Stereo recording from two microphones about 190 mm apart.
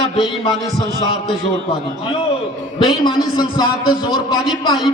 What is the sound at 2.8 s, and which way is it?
A man's voice, 25° left (ahead or behind).